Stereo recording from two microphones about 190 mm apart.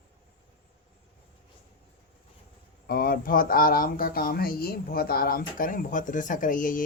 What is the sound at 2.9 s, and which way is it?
Speech, 50° left (ahead or behind).